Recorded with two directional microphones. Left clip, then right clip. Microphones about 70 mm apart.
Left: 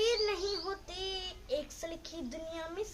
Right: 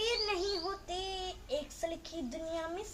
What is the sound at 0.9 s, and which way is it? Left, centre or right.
Child singing, left.